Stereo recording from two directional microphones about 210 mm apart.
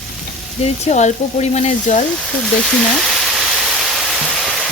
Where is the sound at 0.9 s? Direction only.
30° left (ahead or behind).